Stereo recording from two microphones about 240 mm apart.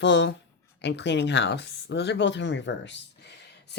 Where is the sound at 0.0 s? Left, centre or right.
Left.